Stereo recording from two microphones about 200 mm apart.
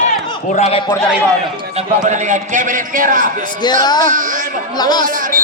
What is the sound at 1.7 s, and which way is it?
A man's voice, 35° right (ahead or behind).